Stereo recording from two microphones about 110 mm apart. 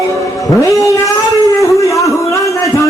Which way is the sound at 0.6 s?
30° left (ahead or behind).